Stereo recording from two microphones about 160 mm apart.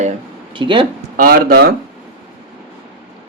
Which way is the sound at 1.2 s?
65° right (ahead or behind).